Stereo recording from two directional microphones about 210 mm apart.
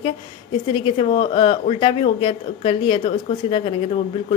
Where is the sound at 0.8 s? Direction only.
25° left (ahead or behind).